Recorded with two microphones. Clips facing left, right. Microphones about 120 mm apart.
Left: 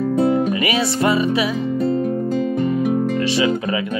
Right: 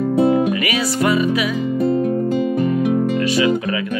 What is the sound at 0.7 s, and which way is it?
Speech, 25° left (ahead or behind).